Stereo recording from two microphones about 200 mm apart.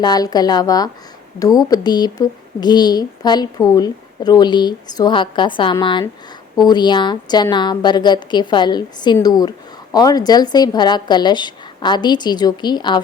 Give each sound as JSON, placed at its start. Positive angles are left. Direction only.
{"t": 0.0, "sound": "a woman's voice", "side_deg": 20}